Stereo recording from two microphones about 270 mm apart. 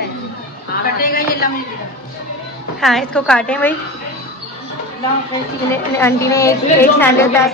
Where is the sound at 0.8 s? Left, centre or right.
Left.